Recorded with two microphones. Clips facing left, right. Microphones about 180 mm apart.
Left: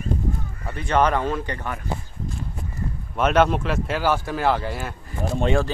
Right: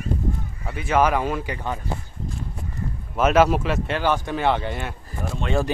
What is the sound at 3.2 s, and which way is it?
Speech, 5° right (ahead or behind).